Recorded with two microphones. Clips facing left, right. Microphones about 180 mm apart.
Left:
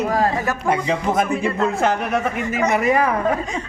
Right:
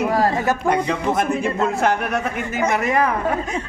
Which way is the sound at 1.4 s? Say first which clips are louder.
Even; centre (ahead or behind).